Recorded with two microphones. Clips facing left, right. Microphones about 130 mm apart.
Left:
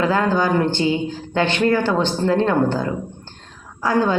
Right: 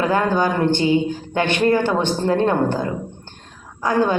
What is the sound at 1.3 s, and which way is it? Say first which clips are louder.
A woman's voice: even; 20° right (ahead or behind).